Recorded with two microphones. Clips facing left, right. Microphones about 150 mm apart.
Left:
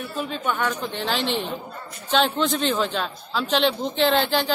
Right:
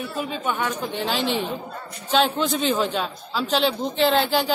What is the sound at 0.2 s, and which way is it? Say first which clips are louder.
Speech: left 1 dB; 5° right (ahead or behind).